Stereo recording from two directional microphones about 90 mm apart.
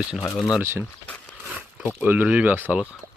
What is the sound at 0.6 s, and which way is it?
Speech, 25° right (ahead or behind).